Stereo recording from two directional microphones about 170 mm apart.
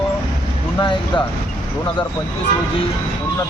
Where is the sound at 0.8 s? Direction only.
25° left (ahead or behind).